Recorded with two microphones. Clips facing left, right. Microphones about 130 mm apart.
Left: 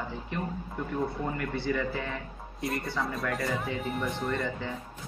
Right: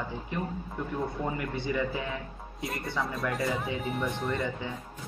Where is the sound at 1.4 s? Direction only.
20° right (ahead or behind).